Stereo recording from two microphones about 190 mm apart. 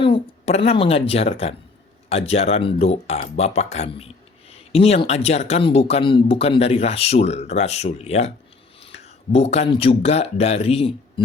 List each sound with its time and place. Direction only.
0.0 s speech: 30° left (ahead or behind)